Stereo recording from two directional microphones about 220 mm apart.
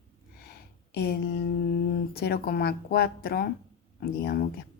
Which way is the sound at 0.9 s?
45° left (ahead or behind).